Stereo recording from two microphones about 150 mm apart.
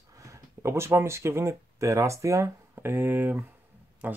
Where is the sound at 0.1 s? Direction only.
20° right (ahead or behind).